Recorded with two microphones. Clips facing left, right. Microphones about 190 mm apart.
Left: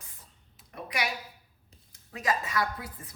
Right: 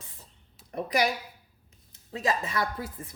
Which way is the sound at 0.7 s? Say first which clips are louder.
Right 7 dB; 35° right (ahead or behind).